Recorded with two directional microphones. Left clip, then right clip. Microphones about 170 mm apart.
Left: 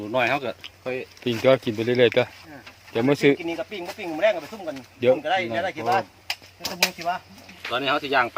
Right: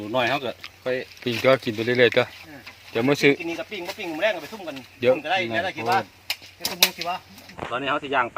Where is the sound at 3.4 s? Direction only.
10° right (ahead or behind).